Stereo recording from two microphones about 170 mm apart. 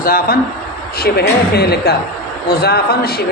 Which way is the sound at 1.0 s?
70° left (ahead or behind).